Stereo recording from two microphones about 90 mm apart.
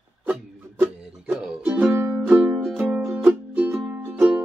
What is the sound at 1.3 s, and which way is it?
Music, 15° right (ahead or behind).